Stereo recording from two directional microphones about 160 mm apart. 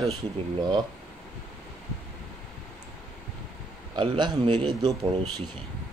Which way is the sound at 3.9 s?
30° right (ahead or behind).